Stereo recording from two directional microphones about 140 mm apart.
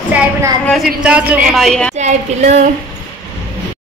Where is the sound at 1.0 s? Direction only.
10° right (ahead or behind).